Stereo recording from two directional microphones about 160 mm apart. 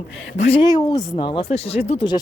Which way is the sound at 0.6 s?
25° left (ahead or behind).